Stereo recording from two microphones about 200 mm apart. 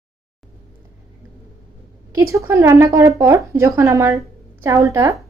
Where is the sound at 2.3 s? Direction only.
15° right (ahead or behind).